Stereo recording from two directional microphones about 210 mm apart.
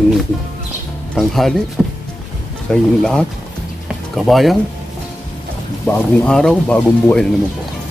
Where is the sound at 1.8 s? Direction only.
Centre (ahead or behind).